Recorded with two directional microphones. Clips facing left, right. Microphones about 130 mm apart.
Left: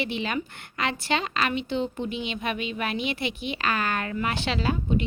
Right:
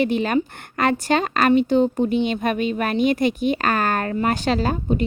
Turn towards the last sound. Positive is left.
turn(degrees=-45)  # may be behind; listen again after turning